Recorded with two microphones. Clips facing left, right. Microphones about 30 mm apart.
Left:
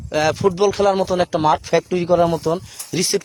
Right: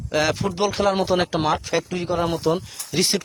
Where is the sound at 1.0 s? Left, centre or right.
Centre.